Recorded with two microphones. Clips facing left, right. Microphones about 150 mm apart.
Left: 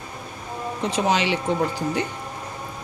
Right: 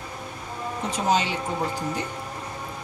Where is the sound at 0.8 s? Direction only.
75° left (ahead or behind).